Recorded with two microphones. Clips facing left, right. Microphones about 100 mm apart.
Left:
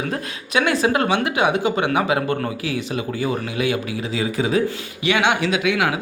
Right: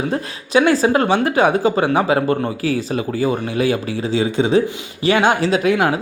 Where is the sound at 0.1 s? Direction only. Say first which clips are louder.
Right 6 dB; 30° right (ahead or behind).